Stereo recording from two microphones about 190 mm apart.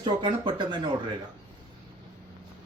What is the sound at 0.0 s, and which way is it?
Speech, 25° right (ahead or behind).